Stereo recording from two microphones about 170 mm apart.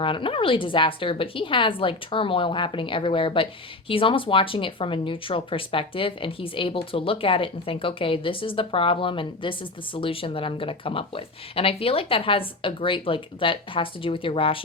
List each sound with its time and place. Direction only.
0.0 s speech: 30° left (ahead or behind)